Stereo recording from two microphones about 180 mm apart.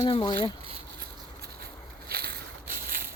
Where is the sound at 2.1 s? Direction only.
60° right (ahead or behind).